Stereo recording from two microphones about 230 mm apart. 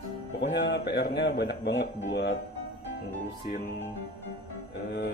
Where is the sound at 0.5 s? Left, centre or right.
Left.